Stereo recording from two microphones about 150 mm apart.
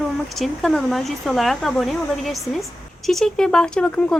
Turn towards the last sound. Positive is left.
turn(degrees=5)  # may be behind; listen again after turning